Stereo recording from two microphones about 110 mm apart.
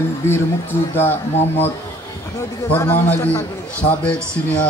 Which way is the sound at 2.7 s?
20° left (ahead or behind).